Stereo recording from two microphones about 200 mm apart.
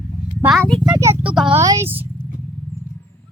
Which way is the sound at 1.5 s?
15° right (ahead or behind).